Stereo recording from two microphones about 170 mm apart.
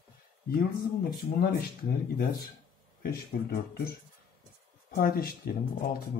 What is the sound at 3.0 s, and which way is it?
Speech, 60° left (ahead or behind).